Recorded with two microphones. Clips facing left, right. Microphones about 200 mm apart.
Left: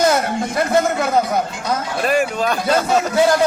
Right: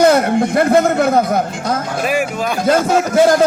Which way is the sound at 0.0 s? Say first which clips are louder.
Right 6 dB; 55° right (ahead or behind).